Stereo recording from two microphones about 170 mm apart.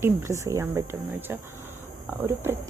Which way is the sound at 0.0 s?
15° right (ahead or behind).